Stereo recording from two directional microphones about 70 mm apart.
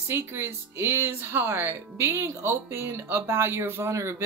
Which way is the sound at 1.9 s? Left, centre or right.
Right.